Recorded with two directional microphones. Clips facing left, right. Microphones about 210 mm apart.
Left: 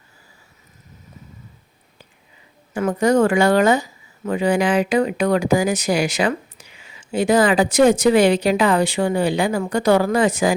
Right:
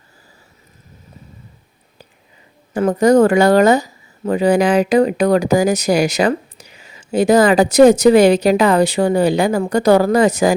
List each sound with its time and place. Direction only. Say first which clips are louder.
2.7 s speech: right 5 dB; 40° right (ahead or behind)